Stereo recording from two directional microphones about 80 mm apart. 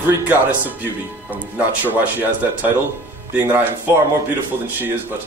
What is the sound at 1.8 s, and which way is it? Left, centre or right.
Speech, right.